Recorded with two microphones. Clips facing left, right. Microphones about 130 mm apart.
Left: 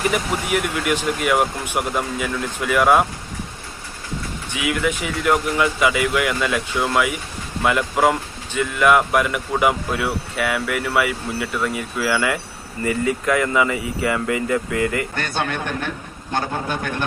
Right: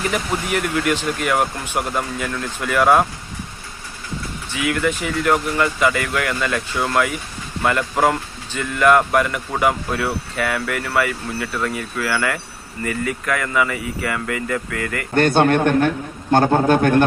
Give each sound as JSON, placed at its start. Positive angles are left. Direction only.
{"t": 0.1, "sound": "speech", "side_deg": 10}
{"t": 4.5, "sound": "speech", "side_deg": 10}
{"t": 15.1, "sound": "speech", "side_deg": -50}